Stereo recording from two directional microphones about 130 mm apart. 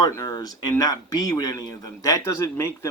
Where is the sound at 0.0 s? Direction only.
25° left (ahead or behind).